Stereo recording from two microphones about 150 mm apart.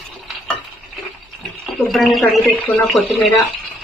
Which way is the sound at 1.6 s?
Centre (ahead or behind).